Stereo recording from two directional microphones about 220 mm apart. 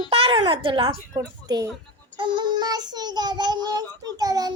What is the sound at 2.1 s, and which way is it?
Child singing, 20° right (ahead or behind).